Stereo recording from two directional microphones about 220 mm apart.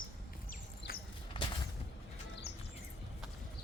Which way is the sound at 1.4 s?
25° left (ahead or behind).